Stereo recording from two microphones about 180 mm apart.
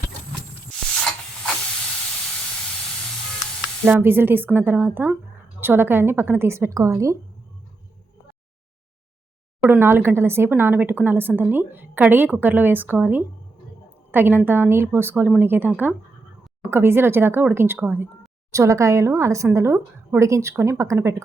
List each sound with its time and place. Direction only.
3.8 s speech: 10° right (ahead or behind)
9.6 s speech: 10° right (ahead or behind)